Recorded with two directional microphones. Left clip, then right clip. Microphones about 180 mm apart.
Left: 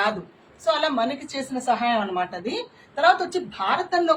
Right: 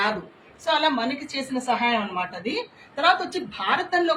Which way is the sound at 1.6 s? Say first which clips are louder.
Left 1 dB; 15° left (ahead or behind).